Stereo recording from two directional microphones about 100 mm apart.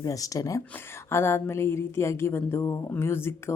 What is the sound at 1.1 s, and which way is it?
Speech, 25° left (ahead or behind).